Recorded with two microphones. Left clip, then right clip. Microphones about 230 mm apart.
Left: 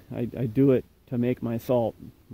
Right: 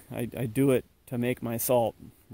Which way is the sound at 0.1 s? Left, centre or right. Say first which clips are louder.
Left 3 dB; right.